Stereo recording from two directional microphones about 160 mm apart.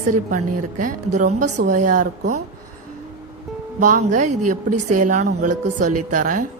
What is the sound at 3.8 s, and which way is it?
A woman's voice, 55° right (ahead or behind).